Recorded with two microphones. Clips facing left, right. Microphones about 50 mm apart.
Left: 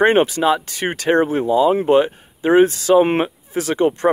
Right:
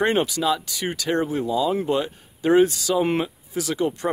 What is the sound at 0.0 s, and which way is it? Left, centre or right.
Speech, left.